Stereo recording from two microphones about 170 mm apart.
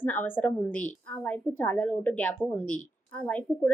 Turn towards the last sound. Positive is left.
turn(degrees=10)  # may be behind; listen again after turning